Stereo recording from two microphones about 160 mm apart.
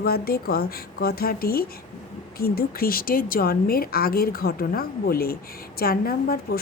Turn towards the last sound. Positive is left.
turn(degrees=70)  # may be behind; listen again after turning